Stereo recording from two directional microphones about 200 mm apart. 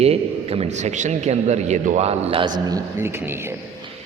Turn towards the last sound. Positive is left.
turn(degrees=-15)  # may be behind; listen again after turning